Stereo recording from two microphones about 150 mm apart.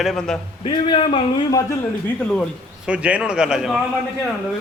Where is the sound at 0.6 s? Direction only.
35° left (ahead or behind).